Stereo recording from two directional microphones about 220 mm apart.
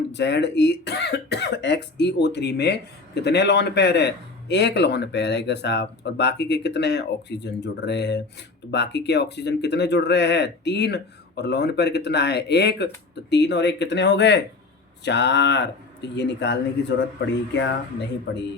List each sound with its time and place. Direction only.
0.1 s a man's voice: 50° left (ahead or behind)